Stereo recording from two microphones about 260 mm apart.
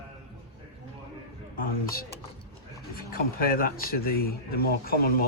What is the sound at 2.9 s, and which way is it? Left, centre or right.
Speech, left.